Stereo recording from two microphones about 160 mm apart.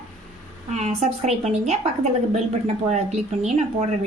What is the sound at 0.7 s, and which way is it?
A woman's voice, 45° right (ahead or behind).